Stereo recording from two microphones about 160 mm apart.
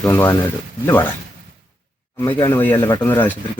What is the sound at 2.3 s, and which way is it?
Speech, 25° left (ahead or behind).